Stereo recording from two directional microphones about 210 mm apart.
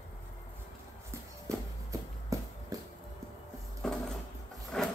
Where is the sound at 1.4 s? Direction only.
15° right (ahead or behind).